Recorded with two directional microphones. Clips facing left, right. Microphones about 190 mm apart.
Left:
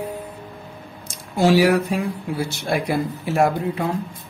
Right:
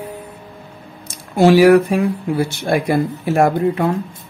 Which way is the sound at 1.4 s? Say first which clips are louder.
Right 6 dB; 60° right (ahead or behind).